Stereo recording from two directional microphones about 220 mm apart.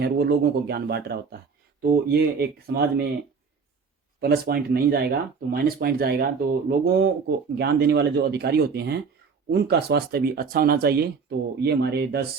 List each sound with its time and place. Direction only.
0.0 s speech: 45° right (ahead or behind)
4.2 s speech: 45° right (ahead or behind)